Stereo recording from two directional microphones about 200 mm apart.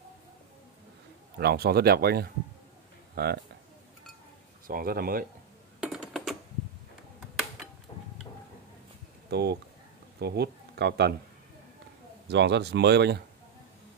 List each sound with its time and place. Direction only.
1.4 s speech: 50° right (ahead or behind)
4.6 s speech: 45° right (ahead or behind)
5.8 s a sound: centre (ahead or behind)
9.3 s speech: 55° right (ahead or behind)
12.3 s speech: 60° right (ahead or behind)